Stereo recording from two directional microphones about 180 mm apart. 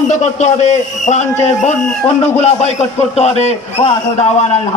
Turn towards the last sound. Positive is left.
turn(degrees=35)  # may be behind; listen again after turning